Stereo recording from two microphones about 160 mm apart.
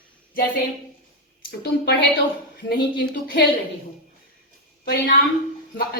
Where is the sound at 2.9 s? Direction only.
90° left.